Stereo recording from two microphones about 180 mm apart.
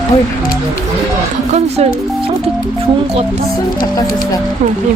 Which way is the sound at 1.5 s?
35° right (ahead or behind).